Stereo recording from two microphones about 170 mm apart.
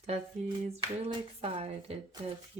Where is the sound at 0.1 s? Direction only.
35° right (ahead or behind).